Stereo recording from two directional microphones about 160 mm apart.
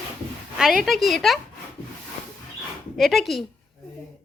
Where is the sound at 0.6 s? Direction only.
Centre (ahead or behind).